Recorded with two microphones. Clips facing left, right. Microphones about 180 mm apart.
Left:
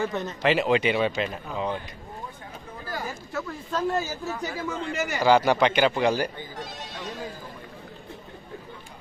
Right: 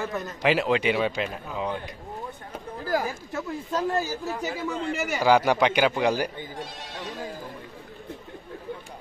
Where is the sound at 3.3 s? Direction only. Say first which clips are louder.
Right 1 dB; 20° right (ahead or behind).